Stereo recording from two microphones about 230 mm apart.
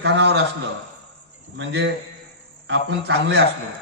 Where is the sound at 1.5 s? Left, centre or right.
Right.